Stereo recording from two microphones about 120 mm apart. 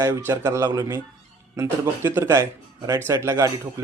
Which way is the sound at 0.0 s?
25° right (ahead or behind).